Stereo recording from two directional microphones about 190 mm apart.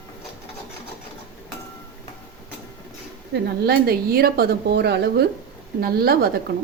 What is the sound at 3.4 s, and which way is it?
A woman's voice, 55° right (ahead or behind).